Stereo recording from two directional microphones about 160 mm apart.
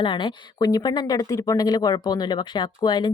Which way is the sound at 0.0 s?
30° left (ahead or behind).